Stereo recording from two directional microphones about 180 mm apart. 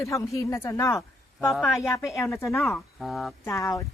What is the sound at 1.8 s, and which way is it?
Speech, 15° left (ahead or behind).